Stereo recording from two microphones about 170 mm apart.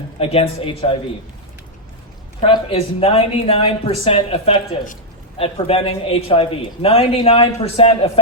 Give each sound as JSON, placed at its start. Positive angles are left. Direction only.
{"t": 0.2, "sound": "a man's voice", "side_deg": 35}
{"t": 2.4, "sound": "a man's voice", "side_deg": 30}